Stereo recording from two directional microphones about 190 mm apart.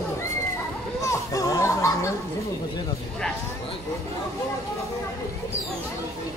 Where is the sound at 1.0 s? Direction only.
15° left (ahead or behind).